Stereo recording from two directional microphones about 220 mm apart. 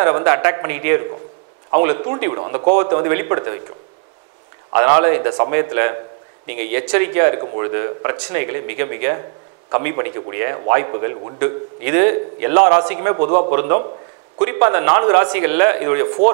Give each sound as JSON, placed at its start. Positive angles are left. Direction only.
{"t": 0.0, "sound": "speech", "side_deg": -20}
{"t": 4.7, "sound": "speech", "side_deg": -20}
{"t": 13.2, "sound": "a man's voice", "side_deg": -35}
{"t": 13.5, "sound": "speech", "side_deg": -20}